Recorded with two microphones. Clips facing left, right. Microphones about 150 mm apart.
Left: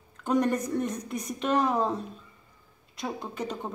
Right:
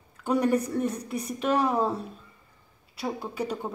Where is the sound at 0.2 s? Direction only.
10° right (ahead or behind).